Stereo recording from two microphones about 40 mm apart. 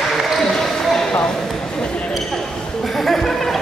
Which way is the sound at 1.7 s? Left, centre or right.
Left.